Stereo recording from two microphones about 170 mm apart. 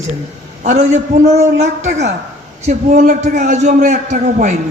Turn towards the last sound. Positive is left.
turn(degrees=-45)  # may be behind; listen again after turning